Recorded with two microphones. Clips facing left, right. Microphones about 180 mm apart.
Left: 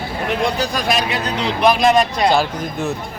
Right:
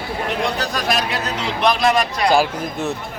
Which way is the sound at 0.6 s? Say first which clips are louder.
Left 2 dB; centre (ahead or behind).